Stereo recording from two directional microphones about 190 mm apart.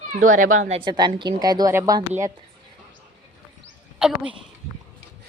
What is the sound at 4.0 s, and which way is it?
Speech, 5° right (ahead or behind).